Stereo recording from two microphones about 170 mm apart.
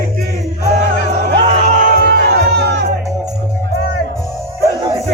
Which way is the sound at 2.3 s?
75° right (ahead or behind).